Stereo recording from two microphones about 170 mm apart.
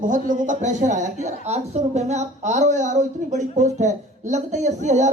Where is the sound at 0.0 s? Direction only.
50° right (ahead or behind).